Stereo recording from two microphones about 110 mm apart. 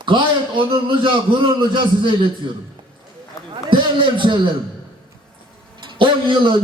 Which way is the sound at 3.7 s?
50° right (ahead or behind).